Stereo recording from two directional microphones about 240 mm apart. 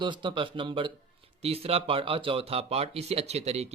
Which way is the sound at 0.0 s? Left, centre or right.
Centre.